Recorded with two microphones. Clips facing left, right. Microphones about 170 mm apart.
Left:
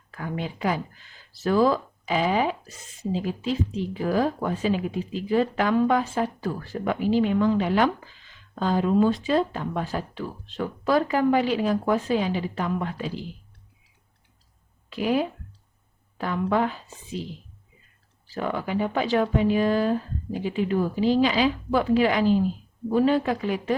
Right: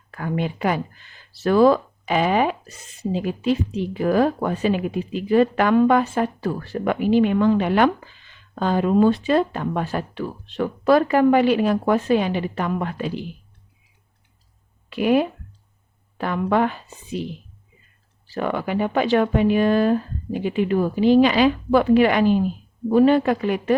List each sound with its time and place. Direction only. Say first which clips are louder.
0.1 s speech: right 6 dB; 65° right (ahead or behind)
14.8 s speech: right 5 dB; 65° right (ahead or behind)